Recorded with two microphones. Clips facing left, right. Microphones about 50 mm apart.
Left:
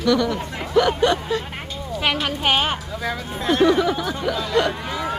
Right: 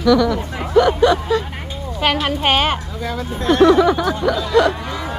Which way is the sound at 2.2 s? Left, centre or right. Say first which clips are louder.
Right 3 dB; right.